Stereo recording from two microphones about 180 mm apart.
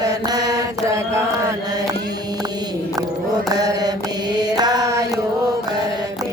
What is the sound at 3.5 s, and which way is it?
Mantra, 20° right (ahead or behind).